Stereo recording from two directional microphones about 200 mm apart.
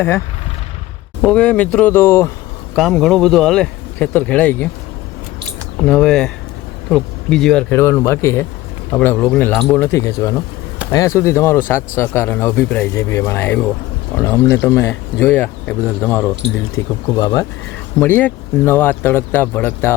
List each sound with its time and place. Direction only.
1.2 s a man's voice: 5° left (ahead or behind)
2.7 s speech: centre (ahead or behind)
5.8 s a man's voice: 5° left (ahead or behind)